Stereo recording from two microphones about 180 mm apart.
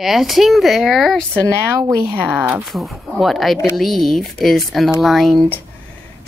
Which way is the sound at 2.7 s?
Centre (ahead or behind).